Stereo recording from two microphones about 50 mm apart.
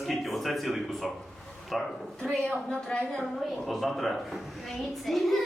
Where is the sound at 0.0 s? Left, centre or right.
Centre.